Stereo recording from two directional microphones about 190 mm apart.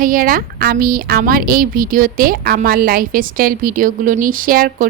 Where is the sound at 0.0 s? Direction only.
45° right (ahead or behind).